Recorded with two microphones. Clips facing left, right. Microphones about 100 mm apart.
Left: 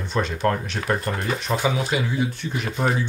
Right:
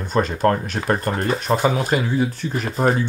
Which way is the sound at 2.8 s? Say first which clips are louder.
Right 5 dB; 40° right (ahead or behind).